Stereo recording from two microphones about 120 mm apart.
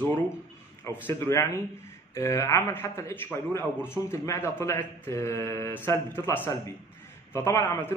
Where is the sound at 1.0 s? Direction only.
20° left (ahead or behind).